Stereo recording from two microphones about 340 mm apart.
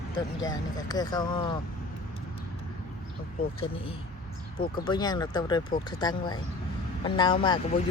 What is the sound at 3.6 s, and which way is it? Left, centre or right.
Speech, centre.